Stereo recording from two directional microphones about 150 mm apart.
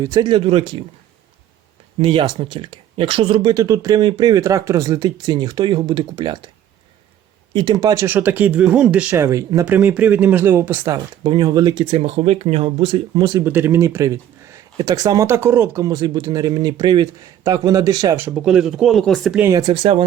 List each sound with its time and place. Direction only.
0.0 s speech: 25° right (ahead or behind)
2.0 s speech: 35° right (ahead or behind)
7.5 s speech: 30° right (ahead or behind)
13.4 s speech: 15° right (ahead or behind)
18.3 s speech: 5° right (ahead or behind)
19.4 s speech: 25° right (ahead or behind)